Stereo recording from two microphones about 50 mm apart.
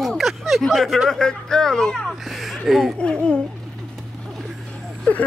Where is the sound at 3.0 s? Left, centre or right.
Centre.